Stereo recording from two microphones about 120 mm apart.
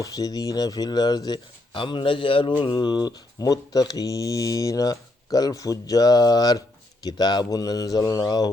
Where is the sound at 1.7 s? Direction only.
45° left (ahead or behind).